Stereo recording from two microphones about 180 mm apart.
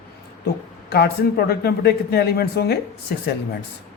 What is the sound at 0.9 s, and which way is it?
Speech, 60° left (ahead or behind).